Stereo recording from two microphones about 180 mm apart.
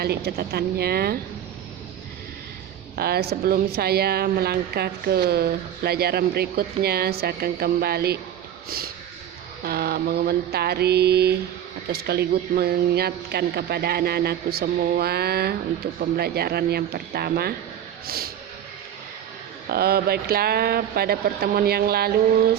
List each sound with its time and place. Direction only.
0.0 s a woman's voice: 60° right (ahead or behind)
2.9 s a woman's voice: 60° right (ahead or behind)
9.6 s a woman's voice: 60° right (ahead or behind)
19.6 s a woman's voice: 60° right (ahead or behind)